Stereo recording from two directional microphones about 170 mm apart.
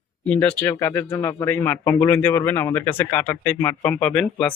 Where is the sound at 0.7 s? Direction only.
20° left (ahead or behind).